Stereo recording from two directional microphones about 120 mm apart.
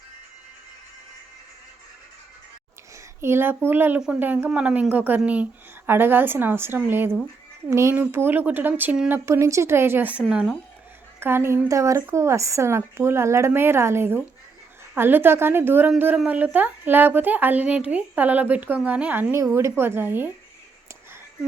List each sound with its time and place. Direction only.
3.2 s a woman's voice: 20° right (ahead or behind)
11.2 s a woman's voice: 20° right (ahead or behind)